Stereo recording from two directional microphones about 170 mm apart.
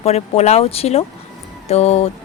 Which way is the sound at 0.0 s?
40° left (ahead or behind).